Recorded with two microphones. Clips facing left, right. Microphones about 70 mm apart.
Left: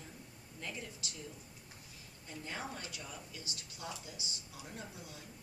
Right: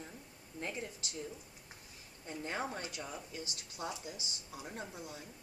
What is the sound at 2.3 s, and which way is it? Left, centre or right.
A woman's voice, right.